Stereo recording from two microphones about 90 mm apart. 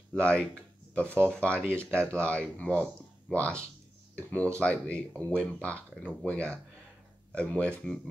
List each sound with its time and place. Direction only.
0.1 s speech: 10° left (ahead or behind)